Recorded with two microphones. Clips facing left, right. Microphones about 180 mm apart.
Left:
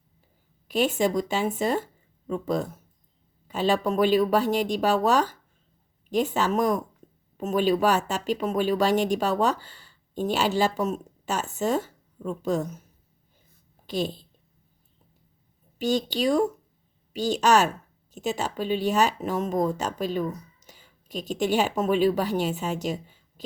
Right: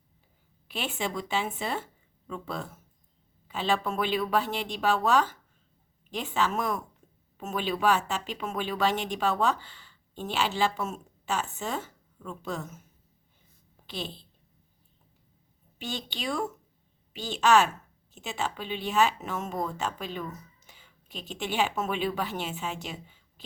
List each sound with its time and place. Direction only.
0.7 s speech: 40° left (ahead or behind)
13.8 s a woman's voice: 45° left (ahead or behind)
15.8 s speech: 40° left (ahead or behind)